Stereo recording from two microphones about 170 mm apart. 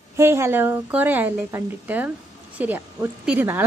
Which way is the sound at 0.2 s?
15° right (ahead or behind).